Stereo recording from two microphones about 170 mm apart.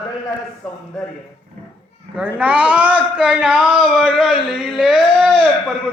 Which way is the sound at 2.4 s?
5° right (ahead or behind).